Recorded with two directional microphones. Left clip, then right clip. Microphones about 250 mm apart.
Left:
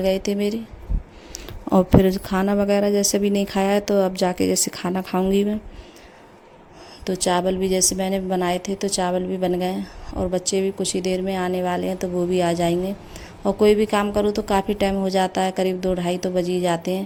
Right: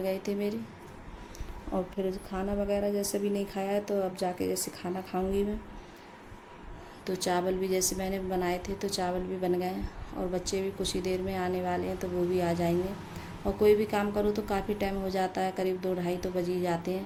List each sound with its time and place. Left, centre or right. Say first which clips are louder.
0.0 s speech: left 10 dB; left
7.0 s speech: left 9 dB; left